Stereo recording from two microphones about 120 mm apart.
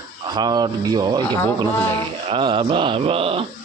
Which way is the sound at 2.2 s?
45° right (ahead or behind).